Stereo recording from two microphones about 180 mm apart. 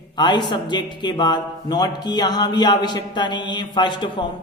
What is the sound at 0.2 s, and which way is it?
Speech, 25° left (ahead or behind).